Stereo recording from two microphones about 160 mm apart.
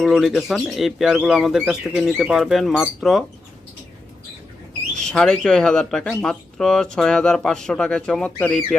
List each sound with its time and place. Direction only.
0.0 s speech: 5° right (ahead or behind)
4.9 s speech: 5° left (ahead or behind)